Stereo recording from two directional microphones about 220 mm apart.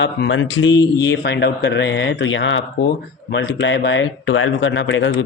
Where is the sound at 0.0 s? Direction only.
55° left (ahead or behind).